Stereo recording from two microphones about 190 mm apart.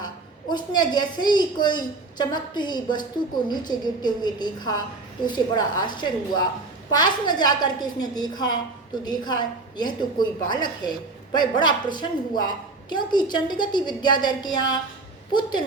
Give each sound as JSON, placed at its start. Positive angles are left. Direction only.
{"t": 0.5, "sound": "a woman's voice", "side_deg": 20}